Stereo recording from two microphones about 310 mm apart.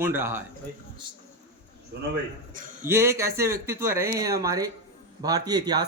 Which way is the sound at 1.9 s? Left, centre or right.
Right.